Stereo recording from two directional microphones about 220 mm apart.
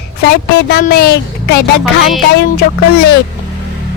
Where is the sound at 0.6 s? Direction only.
45° left (ahead or behind).